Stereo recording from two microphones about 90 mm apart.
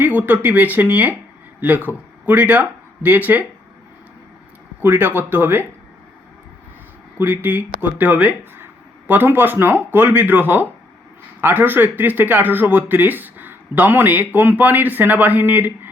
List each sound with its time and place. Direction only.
0.0 s speech: 20° right (ahead or behind)
4.8 s speech: 25° right (ahead or behind)
7.2 s speech: 20° right (ahead or behind)